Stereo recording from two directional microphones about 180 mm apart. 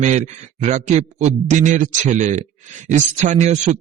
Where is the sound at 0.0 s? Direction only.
40° right (ahead or behind).